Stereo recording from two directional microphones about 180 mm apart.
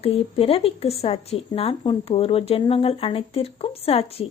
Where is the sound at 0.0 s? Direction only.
35° left (ahead or behind).